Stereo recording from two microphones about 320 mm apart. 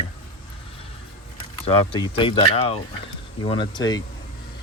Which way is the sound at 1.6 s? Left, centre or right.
Centre.